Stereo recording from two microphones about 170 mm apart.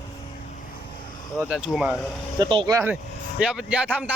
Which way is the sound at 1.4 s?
5° right (ahead or behind).